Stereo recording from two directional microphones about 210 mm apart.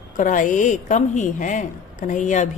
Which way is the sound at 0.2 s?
40° left (ahead or behind).